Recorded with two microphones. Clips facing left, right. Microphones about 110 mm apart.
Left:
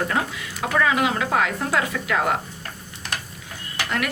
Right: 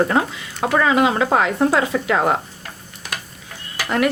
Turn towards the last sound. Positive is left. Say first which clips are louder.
# right 8 dB
turn(degrees=-30)  # may be behind; listen again after turning